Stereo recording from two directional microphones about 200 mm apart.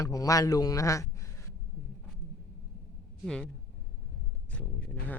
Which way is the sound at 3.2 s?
5° left (ahead or behind).